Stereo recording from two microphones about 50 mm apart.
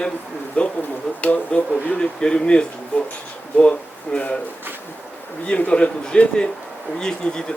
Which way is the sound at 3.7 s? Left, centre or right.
Left.